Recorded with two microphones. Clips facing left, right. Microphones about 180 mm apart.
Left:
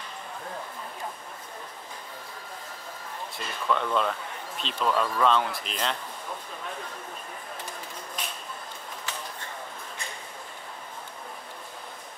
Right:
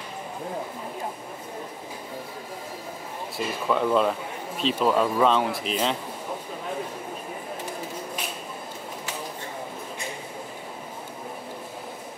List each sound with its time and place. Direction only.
3.3 s speech: 5° right (ahead or behind)
4.9 s speech: 20° right (ahead or behind)
5.2 s speech: 5° right (ahead or behind)